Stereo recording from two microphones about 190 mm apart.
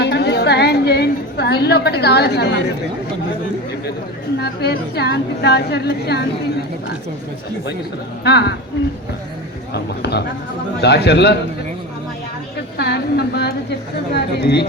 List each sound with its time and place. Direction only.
0.0 s a sound: 60° left (ahead or behind)
4.4 s a woman's voice: 60° left (ahead or behind)
8.2 s a woman's voice: 60° left (ahead or behind)
9.7 s a woman's voice: 60° left (ahead or behind)
12.7 s a woman's voice: 60° left (ahead or behind)